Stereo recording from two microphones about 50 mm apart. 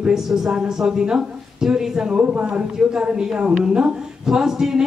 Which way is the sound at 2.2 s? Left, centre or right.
Right.